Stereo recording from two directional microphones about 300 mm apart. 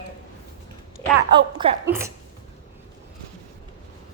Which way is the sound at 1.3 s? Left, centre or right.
Centre.